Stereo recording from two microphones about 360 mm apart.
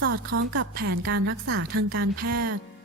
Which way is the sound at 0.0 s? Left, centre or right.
Right.